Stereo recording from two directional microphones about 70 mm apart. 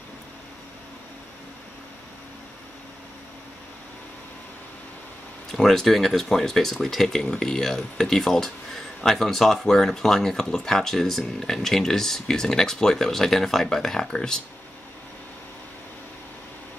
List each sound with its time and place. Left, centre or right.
5.5 s speech: centre